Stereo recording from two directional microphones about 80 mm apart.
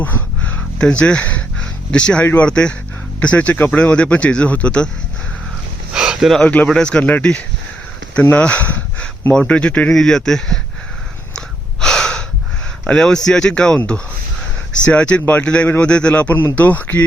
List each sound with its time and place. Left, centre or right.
0.0 s a sound: left
0.8 s speech: centre
2.2 s a man's voice: left
2.5 s speech: centre
5.9 s a sound: centre
6.4 s a man's voice: centre
11.3 s gasp: centre
12.8 s a man's voice: centre